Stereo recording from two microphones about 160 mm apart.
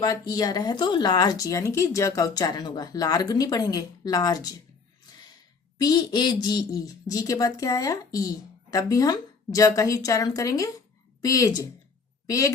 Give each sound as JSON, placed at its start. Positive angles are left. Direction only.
{"t": 0.0, "sound": "speech", "side_deg": 25}
{"t": 5.8, "sound": "speech", "side_deg": 25}